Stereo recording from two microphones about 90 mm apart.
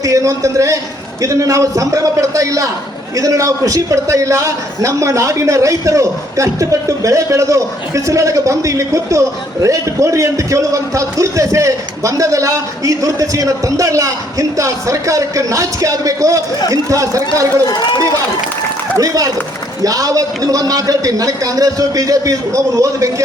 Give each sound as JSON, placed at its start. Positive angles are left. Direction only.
{"t": 0.0, "sound": "a man's voice", "side_deg": -35}
{"t": 18.9, "sound": "a man's voice", "side_deg": -40}